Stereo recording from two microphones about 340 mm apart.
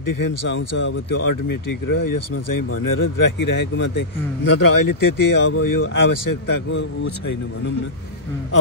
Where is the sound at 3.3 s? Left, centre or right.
Left.